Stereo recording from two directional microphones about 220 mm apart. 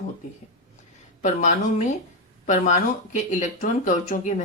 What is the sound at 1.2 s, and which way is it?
Speech, 35° left (ahead or behind).